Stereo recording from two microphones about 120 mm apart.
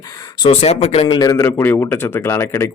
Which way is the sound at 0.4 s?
60° left (ahead or behind).